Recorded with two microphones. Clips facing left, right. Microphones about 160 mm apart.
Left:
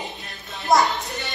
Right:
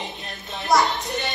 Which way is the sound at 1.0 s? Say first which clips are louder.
Right 4 dB; 20° right (ahead or behind).